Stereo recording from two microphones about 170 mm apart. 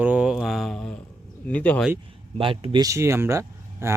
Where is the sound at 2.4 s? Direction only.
30° right (ahead or behind); by 3.9 s 15° right (ahead or behind).